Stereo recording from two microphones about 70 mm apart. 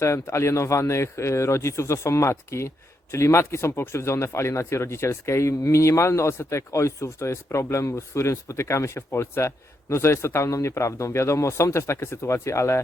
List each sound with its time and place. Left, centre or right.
0.0 s speech: left